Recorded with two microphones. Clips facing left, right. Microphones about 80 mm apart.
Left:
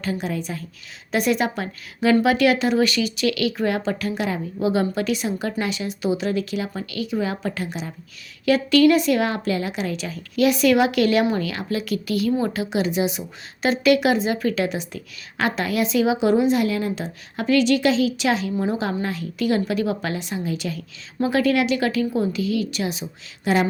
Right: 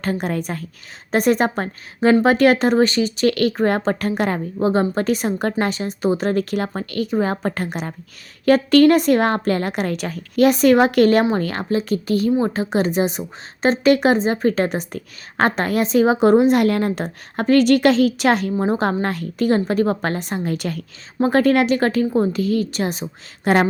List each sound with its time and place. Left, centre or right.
0.0 s speech: right
1.1 s a woman's voice: right
18.5 s a woman's voice: right